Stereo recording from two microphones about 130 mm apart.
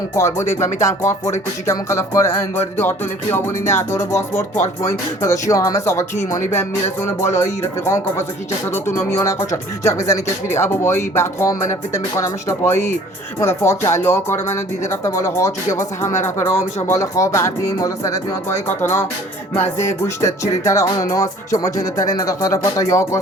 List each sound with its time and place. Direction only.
0.2 s speech: 20° left (ahead or behind)
2.7 s music: 15° left (ahead or behind)
3.7 s speech: 20° left (ahead or behind)
4.5 s speech: 75° left (ahead or behind)
4.9 s speech: 25° left (ahead or behind)
19.8 s speech: 20° left (ahead or behind)